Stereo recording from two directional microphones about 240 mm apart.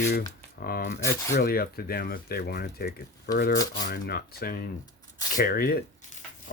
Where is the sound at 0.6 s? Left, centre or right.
Left.